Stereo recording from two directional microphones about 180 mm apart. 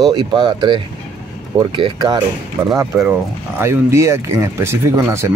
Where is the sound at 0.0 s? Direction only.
25° right (ahead or behind).